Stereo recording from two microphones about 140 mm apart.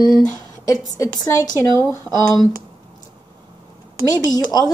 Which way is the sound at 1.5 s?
20° left (ahead or behind).